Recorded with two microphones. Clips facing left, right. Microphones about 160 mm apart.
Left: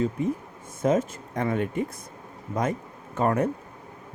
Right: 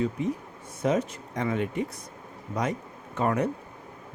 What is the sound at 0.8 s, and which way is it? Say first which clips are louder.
Speech: left 3 dB; 50° left (ahead or behind).